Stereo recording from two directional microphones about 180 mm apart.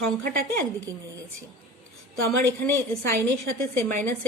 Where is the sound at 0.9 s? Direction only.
20° right (ahead or behind).